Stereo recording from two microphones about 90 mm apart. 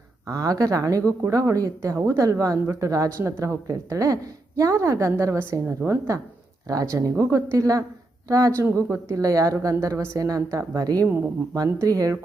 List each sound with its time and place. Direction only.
0.3 s a woman's voice: 40° right (ahead or behind)